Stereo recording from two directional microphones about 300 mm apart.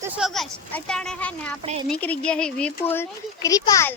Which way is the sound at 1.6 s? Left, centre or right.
Centre.